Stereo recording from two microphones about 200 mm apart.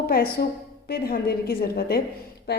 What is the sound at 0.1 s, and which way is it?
A woman's voice, 50° left (ahead or behind).